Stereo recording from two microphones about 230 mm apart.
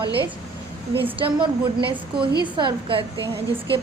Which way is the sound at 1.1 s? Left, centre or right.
Right.